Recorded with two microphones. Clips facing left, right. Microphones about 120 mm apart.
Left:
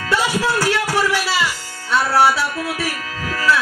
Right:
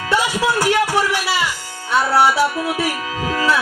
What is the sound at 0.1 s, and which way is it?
Music, 20° right (ahead or behind).